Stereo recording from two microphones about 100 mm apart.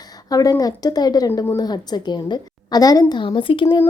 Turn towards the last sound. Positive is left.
turn(degrees=55)  # may be behind; listen again after turning